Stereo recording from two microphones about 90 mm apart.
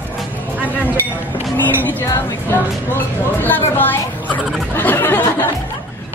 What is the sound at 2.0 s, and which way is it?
Speech, 30° left (ahead or behind).